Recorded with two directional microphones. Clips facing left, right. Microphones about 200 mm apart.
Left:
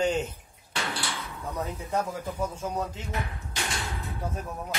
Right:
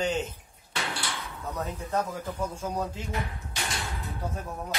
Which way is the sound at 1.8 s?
10° left (ahead or behind).